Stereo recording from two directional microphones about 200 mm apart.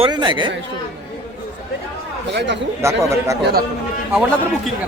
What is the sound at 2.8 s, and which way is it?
Speech, 15° right (ahead or behind).